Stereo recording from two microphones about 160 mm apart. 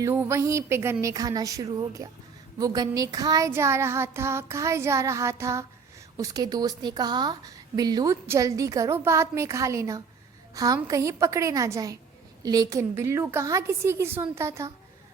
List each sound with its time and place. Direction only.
0.0 s child singing: 15° right (ahead or behind)
1.0 s a woman's voice: 20° right (ahead or behind)
2.6 s child singing: 25° right (ahead or behind)
6.1 s a woman's voice: 20° right (ahead or behind)
12.4 s child singing: 25° right (ahead or behind)